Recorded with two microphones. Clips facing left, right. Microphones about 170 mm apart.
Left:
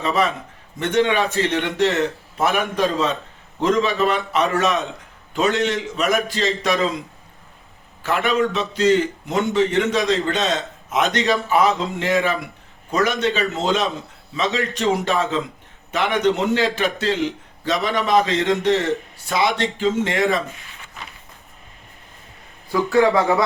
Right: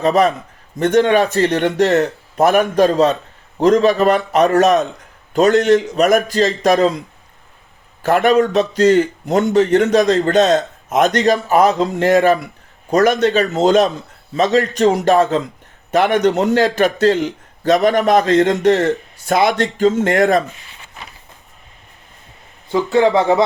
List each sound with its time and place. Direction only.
0.0 s speech: 40° right (ahead or behind)
8.0 s a man's voice: 40° right (ahead or behind)
22.7 s speech: 20° right (ahead or behind)